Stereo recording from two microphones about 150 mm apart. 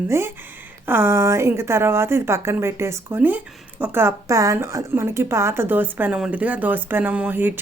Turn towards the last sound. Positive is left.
turn(degrees=-15)  # may be behind; listen again after turning